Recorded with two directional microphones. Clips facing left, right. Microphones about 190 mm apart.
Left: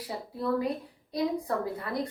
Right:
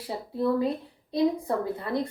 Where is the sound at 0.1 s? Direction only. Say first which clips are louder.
Right 4 dB; 25° right (ahead or behind).